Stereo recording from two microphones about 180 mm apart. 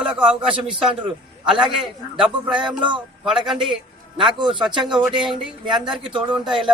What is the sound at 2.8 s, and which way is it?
Speech, 25° right (ahead or behind).